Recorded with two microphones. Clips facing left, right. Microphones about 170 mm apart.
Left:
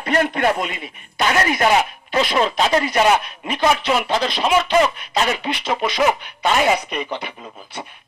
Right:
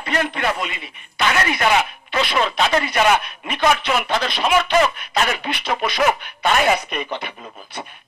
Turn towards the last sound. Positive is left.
turn(degrees=20)  # may be behind; listen again after turning